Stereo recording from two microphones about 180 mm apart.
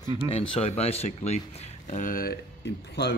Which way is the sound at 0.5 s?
35° left (ahead or behind).